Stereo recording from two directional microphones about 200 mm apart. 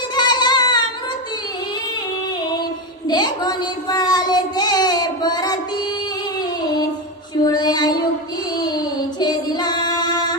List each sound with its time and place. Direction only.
0.2 s child singing: 20° left (ahead or behind)
3.1 s child singing: 20° left (ahead or behind)
7.4 s child singing: 20° left (ahead or behind)
9.2 s child singing: 20° left (ahead or behind)